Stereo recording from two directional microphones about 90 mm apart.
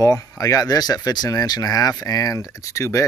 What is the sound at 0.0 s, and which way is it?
Speech, 35° left (ahead or behind).